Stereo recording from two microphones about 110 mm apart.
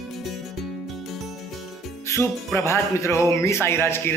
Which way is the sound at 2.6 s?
25° left (ahead or behind).